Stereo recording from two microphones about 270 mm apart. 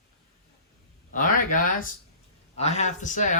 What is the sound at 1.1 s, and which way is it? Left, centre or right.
Speech, left.